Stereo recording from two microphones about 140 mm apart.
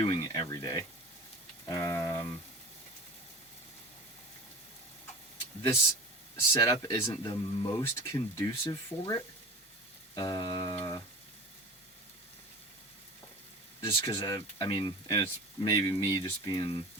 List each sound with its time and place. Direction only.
0.0 s speech: 30° left (ahead or behind)
6.5 s speech: 25° left (ahead or behind)
10.2 s speech: 30° left (ahead or behind)
13.8 s speech: 20° left (ahead or behind)